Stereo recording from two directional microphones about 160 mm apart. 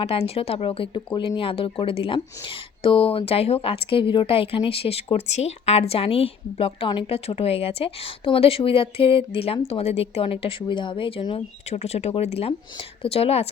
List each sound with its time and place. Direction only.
0.0 s a woman's voice: 35° left (ahead or behind)